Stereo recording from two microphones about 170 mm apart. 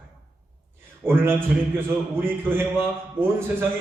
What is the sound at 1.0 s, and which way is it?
A man's voice, 15° right (ahead or behind).